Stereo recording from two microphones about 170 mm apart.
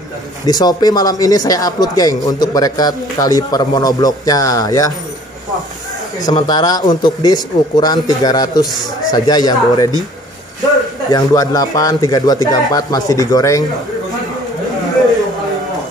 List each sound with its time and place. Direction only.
0.5 s speech: 25° left (ahead or behind)
6.2 s speech: 25° left (ahead or behind)
11.1 s speech: 20° left (ahead or behind)